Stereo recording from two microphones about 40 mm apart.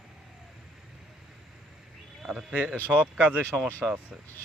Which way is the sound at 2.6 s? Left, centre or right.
Right.